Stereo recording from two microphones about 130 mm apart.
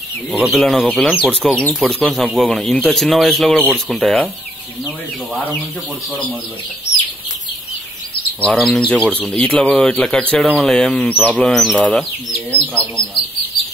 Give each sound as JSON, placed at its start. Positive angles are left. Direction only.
{"t": 0.4, "sound": "speech", "side_deg": 0}
{"t": 5.3, "sound": "speech", "side_deg": 10}
{"t": 8.5, "sound": "speech", "side_deg": 5}
{"t": 9.0, "sound": "speech", "side_deg": -10}
{"t": 9.3, "sound": "speech", "side_deg": 10}